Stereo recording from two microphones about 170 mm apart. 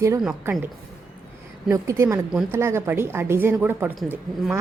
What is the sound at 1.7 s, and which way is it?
A woman's voice, 20° right (ahead or behind).